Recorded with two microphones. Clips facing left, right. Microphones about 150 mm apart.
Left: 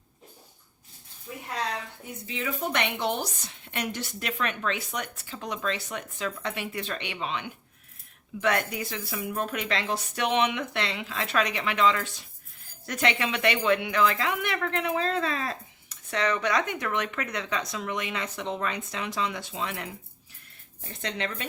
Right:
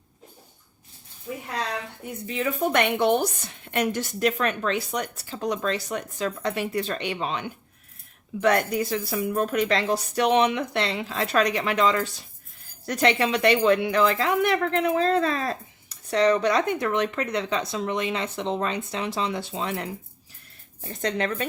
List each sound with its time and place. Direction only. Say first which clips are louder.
2.2 s a woman's voice: right 6 dB; 45° right (ahead or behind)
21.0 s speech: right 7 dB; 45° right (ahead or behind)